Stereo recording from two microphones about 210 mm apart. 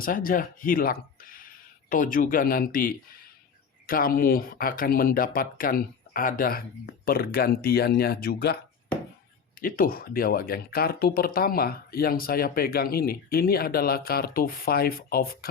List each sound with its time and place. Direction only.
0.0 s speech: 40° left (ahead or behind)
9.6 s speech: 40° left (ahead or behind)